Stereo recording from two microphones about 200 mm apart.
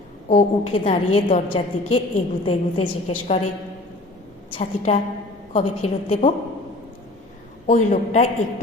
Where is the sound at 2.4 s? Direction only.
30° left (ahead or behind).